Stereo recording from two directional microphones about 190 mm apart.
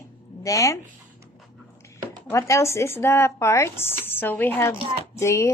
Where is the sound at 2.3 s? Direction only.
15° left (ahead or behind).